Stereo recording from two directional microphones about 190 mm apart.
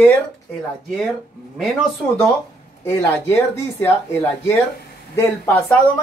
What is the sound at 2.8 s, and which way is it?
Speech, 10° left (ahead or behind).